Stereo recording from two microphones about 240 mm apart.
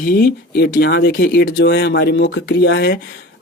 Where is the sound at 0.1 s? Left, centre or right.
Left.